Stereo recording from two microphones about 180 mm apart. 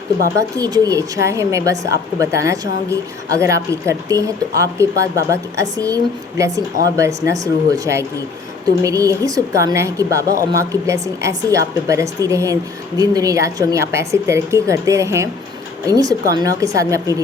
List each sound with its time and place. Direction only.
0.3 s a woman's voice: 20° right (ahead or behind)